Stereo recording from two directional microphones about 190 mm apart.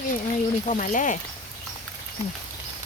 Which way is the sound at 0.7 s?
40° left (ahead or behind).